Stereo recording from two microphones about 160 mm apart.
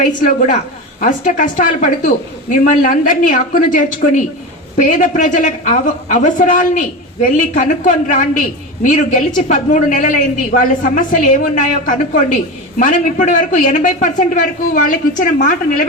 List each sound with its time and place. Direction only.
0.0 s a man's voice: 55° left (ahead or behind)